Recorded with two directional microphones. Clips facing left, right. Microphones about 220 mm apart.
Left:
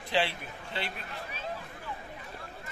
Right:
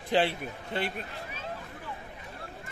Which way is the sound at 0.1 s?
45° right (ahead or behind).